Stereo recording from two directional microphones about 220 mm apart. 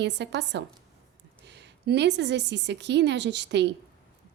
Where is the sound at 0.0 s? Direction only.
50° right (ahead or behind).